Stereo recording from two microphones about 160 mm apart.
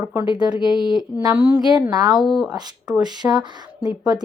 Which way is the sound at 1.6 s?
25° right (ahead or behind).